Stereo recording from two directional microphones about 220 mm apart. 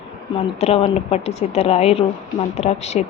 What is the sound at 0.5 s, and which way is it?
Speech, 25° left (ahead or behind).